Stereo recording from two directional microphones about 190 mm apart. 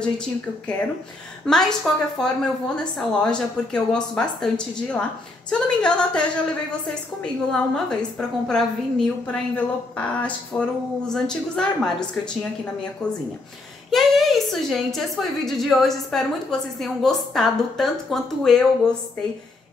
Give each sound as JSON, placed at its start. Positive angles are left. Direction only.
{"t": 0.2, "sound": "a woman's voice", "side_deg": 5}
{"t": 13.0, "sound": "a woman's voice", "side_deg": 5}